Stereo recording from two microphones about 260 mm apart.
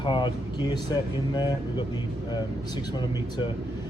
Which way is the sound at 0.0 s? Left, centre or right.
Centre.